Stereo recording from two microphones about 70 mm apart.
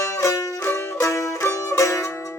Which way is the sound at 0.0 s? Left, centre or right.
Left.